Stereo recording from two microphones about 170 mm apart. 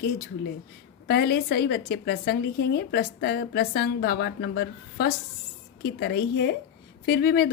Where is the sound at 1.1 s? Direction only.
70° left (ahead or behind).